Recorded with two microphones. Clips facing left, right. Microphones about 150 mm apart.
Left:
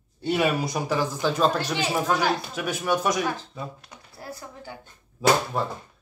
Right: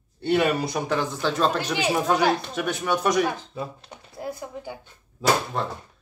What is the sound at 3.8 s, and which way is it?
Speech, 20° right (ahead or behind).